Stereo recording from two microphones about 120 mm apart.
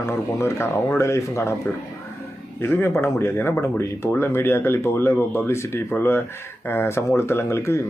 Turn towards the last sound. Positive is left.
turn(degrees=20)  # may be behind; listen again after turning